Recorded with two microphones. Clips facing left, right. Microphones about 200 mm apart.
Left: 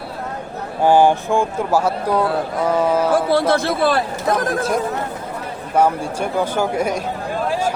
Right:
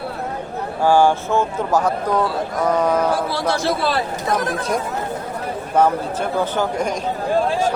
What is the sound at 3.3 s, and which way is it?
Speech, 55° left (ahead or behind).